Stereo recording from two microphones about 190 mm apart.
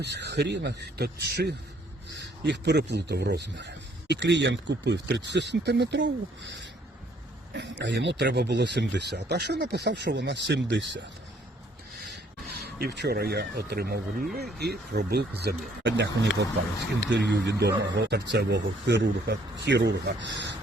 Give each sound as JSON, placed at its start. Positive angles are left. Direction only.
{"t": 0.0, "sound": "speech", "side_deg": -65}
{"t": 12.0, "sound": "a sound", "side_deg": 0}
{"t": 12.5, "sound": "speech", "side_deg": -55}